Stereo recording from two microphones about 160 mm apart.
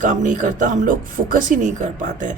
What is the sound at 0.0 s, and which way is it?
Speech, 55° right (ahead or behind).